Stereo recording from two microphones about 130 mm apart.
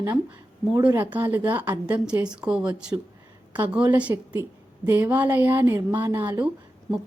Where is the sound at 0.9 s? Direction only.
15° right (ahead or behind).